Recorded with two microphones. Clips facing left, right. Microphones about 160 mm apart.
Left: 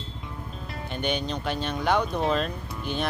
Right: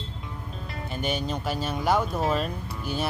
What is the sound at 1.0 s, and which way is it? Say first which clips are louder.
Speech: left 1 dB; 5° right (ahead or behind).